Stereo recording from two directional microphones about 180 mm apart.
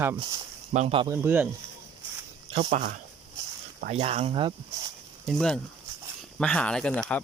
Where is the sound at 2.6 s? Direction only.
50° right (ahead or behind).